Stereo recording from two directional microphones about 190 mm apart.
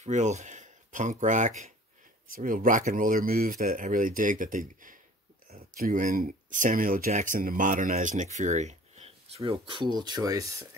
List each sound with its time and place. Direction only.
0.0 s speech: 40° right (ahead or behind); by 10.5 s 20° right (ahead or behind)